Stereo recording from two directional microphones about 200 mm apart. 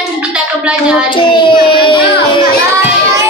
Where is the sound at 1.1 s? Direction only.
25° left (ahead or behind).